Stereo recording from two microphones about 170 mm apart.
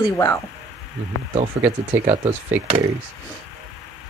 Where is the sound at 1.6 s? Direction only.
40° right (ahead or behind).